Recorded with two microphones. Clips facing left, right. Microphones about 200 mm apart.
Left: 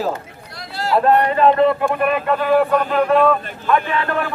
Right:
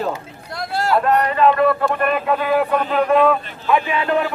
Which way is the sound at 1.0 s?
30° left (ahead or behind).